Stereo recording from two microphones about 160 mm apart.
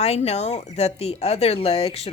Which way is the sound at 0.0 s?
40° left (ahead or behind).